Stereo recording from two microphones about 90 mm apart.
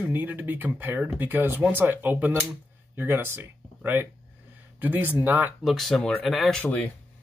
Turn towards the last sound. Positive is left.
turn(degrees=15)  # may be behind; listen again after turning